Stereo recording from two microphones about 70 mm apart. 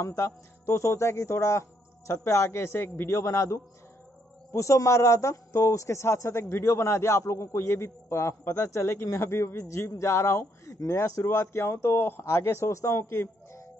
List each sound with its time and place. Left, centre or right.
0.0 s speech: left
11.2 s a man's voice: left